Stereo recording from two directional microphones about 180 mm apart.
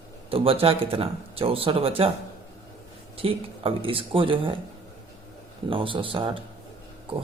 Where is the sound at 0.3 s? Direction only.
30° right (ahead or behind).